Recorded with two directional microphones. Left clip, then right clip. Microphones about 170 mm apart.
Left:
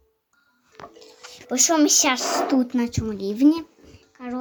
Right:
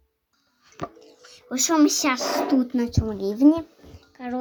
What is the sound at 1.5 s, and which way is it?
Speech, 10° left (ahead or behind).